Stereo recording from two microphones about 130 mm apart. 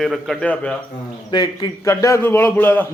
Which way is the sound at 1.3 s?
35° left (ahead or behind).